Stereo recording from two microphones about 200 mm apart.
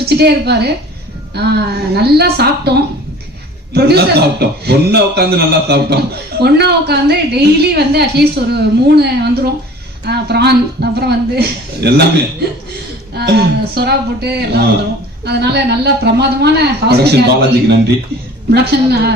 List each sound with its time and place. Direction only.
0.0 s a woman's voice: 55° right (ahead or behind)